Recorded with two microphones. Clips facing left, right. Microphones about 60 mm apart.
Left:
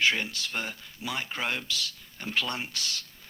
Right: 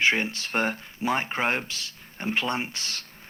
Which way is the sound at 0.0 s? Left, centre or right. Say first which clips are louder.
Right 3 dB; right.